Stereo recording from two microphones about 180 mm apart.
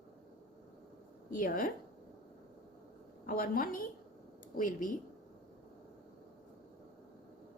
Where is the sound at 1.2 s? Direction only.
50° left (ahead or behind).